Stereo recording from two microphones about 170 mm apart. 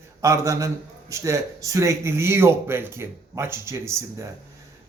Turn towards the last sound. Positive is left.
turn(degrees=-15)  # may be behind; listen again after turning